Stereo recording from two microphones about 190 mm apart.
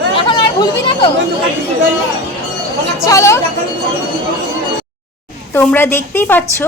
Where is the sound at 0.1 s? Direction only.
25° left (ahead or behind).